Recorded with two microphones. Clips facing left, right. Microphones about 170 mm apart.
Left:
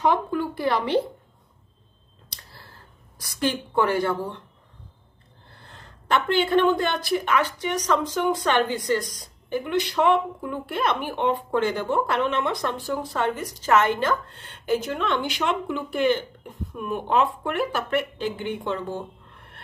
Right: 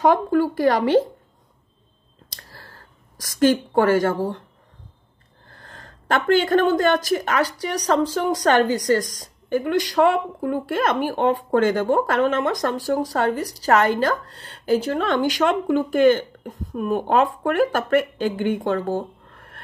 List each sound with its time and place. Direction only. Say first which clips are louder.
0.0 s speech: right 5 dB; 40° right (ahead or behind)
3.2 s speech: right 8 dB; 45° right (ahead or behind)
5.6 s speech: right 4 dB; 45° right (ahead or behind)